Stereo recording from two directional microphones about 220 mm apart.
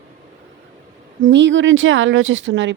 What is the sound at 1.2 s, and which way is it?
Speech, 55° right (ahead or behind).